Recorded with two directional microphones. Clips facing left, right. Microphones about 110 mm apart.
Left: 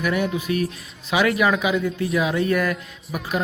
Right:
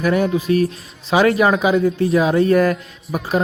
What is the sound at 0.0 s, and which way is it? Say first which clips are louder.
Speech: right 6 dB; 35° right (ahead or behind).